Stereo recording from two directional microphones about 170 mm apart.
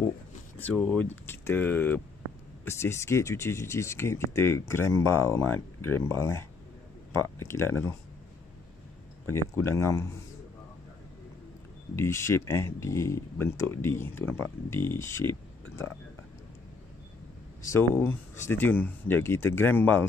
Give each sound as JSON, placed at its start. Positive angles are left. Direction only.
{"t": 0.6, "sound": "speech", "side_deg": 10}
{"t": 9.2, "sound": "speech", "side_deg": 15}
{"t": 11.9, "sound": "speech", "side_deg": 15}
{"t": 17.6, "sound": "speech", "side_deg": 15}